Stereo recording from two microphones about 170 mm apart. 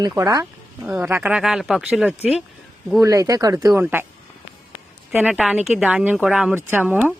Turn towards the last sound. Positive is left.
turn(degrees=-10)  # may be behind; listen again after turning